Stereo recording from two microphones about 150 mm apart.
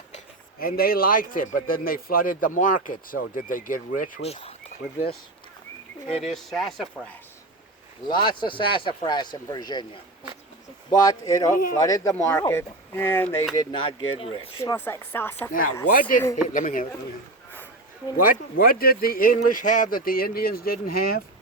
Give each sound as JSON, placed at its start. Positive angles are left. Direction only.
{"t": 0.6, "sound": "a man's voice", "side_deg": 80}
{"t": 4.2, "sound": "speech", "side_deg": 40}
{"t": 4.8, "sound": "speech", "side_deg": 0}
{"t": 6.2, "sound": "speech", "side_deg": 0}
{"t": 8.0, "sound": "speech", "side_deg": 30}
{"t": 13.6, "sound": "speech", "side_deg": 30}
{"t": 14.6, "sound": "speech", "side_deg": 20}
{"t": 15.9, "sound": "a man's voice", "side_deg": 65}
{"t": 18.2, "sound": "a man's voice", "side_deg": 70}